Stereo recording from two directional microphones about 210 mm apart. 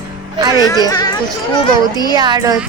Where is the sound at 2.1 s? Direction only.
20° right (ahead or behind).